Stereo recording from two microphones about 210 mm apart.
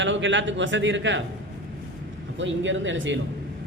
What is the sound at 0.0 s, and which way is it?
A man's voice, 60° right (ahead or behind).